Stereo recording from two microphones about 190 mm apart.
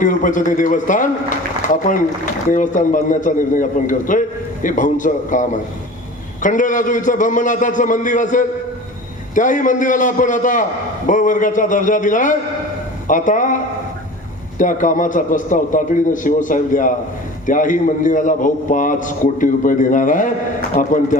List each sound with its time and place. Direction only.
0.0 s a man's voice: 45° left (ahead or behind)
14.6 s a man's voice: 45° left (ahead or behind)